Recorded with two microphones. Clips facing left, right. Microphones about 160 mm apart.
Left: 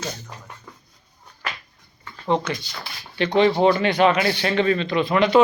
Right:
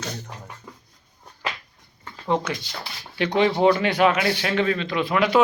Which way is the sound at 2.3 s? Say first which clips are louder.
Left 1 dB; 5° right (ahead or behind).